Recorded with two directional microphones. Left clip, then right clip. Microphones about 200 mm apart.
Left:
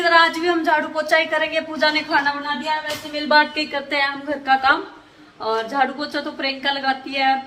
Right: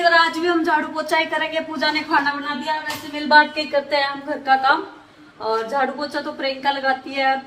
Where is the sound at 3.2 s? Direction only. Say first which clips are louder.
Right 2 dB; 20° left (ahead or behind).